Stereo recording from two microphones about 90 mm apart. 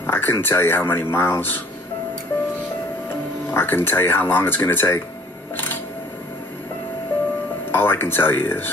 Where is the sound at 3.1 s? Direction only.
25° left (ahead or behind).